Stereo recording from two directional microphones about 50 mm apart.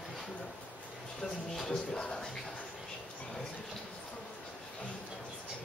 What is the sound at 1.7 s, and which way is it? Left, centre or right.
Music, centre.